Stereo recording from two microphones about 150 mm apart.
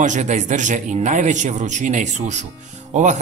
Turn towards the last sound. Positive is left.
turn(degrees=-55)  # may be behind; listen again after turning